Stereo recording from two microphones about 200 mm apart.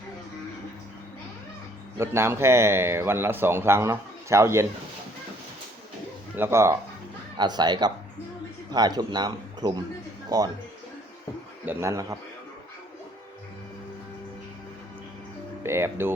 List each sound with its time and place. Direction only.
2.0 s a man's voice: 10° right (ahead or behind)
6.3 s a man's voice: 10° right (ahead or behind)
11.6 s a man's voice: 10° right (ahead or behind)
15.6 s a man's voice: 10° right (ahead or behind)